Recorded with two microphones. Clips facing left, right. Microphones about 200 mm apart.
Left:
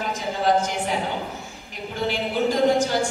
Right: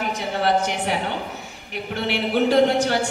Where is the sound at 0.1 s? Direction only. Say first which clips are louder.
Left 1 dB; 70° right (ahead or behind).